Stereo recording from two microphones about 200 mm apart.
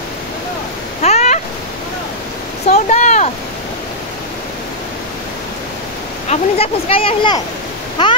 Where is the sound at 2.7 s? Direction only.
35° left (ahead or behind).